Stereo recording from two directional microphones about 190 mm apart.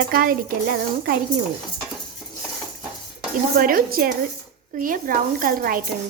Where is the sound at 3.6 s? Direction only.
50° right (ahead or behind).